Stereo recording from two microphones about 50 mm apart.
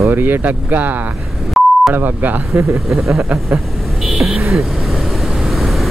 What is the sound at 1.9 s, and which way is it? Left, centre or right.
Speech, right.